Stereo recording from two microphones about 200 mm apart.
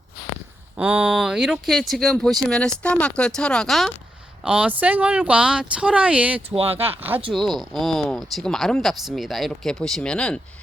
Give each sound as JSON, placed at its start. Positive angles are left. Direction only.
{"t": 0.8, "sound": "speech", "side_deg": -5}
{"t": 6.6, "sound": "speech", "side_deg": -30}
{"t": 7.3, "sound": "speech", "side_deg": 0}